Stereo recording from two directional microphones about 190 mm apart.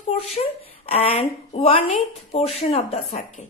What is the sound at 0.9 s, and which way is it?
Speech, 30° left (ahead or behind).